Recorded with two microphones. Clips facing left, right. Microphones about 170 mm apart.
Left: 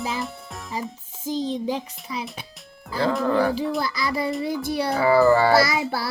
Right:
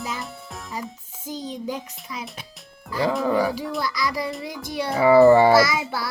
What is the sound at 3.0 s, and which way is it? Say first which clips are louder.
Speech: even; 5° right (ahead or behind).